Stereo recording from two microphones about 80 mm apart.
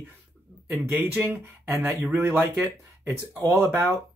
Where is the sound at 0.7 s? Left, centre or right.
Right.